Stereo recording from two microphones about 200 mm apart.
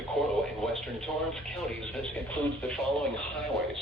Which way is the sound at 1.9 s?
5° left (ahead or behind).